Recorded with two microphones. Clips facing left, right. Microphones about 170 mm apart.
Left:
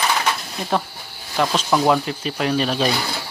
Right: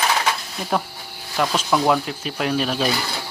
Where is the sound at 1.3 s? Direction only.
Centre (ahead or behind).